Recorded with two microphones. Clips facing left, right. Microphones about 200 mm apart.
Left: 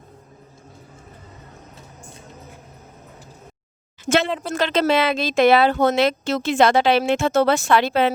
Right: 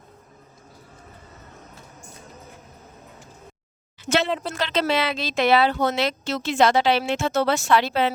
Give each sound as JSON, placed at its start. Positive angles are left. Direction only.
{"t": 4.0, "sound": "a woman's voice", "side_deg": 50}